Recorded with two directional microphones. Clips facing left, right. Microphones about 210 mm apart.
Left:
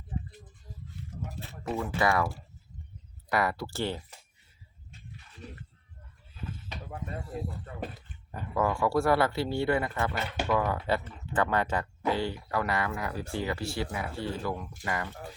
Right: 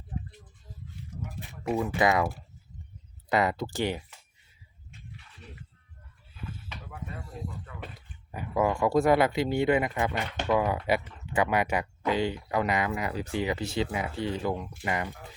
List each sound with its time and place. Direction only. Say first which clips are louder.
0.1 s a sound: left 1 dB; 5° left (ahead or behind)
1.4 s speech: right 4 dB; 15° right (ahead or behind)
8.3 s speech: right 2 dB; 10° right (ahead or behind)